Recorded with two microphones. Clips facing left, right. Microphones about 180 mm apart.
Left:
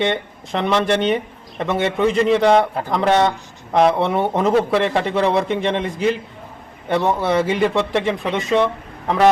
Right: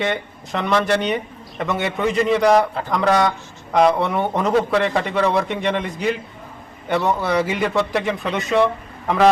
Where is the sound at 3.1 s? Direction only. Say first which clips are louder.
Left 2 dB; 25° left (ahead or behind).